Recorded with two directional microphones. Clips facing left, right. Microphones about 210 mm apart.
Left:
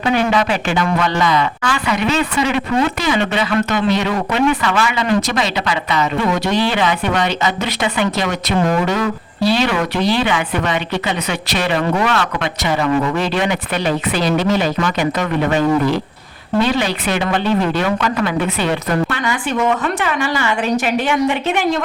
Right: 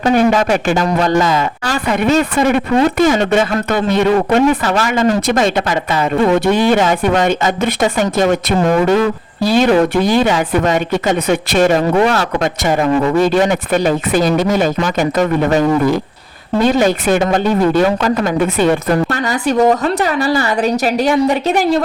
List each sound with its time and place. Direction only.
0.0 s speech: 45° right (ahead or behind)